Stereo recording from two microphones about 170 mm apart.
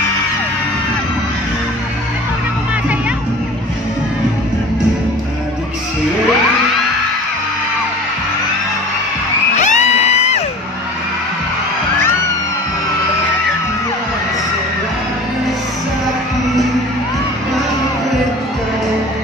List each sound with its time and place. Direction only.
9.6 s music: 45° left (ahead or behind)